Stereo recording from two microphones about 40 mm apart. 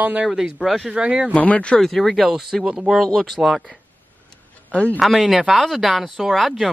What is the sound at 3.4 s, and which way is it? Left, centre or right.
Speech, centre.